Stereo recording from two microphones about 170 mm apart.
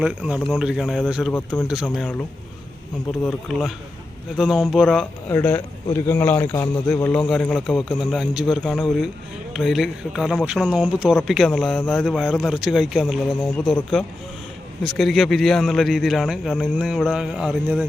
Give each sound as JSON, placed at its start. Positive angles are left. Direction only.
{"t": 0.0, "sound": "a man's voice", "side_deg": -5}
{"t": 3.2, "sound": "a man's voice", "side_deg": 0}
{"t": 5.3, "sound": "a man's voice", "side_deg": 15}